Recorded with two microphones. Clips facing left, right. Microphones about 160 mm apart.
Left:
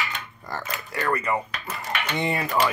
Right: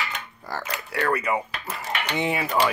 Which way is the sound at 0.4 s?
5° right (ahead or behind).